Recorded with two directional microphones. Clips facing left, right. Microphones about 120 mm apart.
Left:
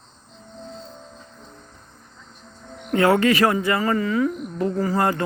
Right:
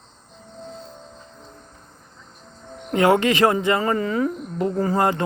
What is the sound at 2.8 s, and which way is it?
Speech, 20° right (ahead or behind).